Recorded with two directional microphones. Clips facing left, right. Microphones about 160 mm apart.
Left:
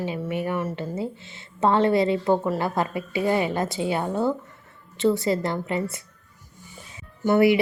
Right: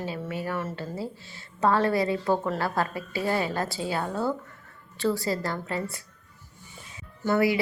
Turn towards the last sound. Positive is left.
turn(degrees=25)  # may be behind; listen again after turning